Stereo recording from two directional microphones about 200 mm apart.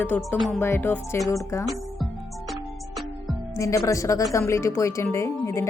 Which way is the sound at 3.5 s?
15° left (ahead or behind).